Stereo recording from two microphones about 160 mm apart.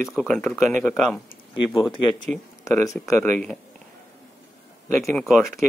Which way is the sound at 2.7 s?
20° left (ahead or behind).